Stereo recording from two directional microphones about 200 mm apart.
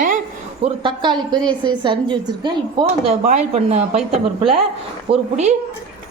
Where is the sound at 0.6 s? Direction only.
25° right (ahead or behind).